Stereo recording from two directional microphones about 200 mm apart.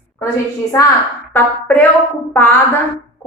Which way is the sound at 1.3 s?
10° left (ahead or behind).